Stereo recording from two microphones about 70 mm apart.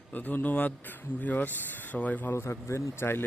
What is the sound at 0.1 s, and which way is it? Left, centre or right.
Speech, left.